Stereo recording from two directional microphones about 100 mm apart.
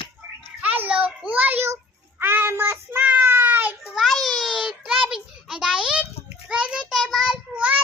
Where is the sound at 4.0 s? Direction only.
Centre (ahead or behind).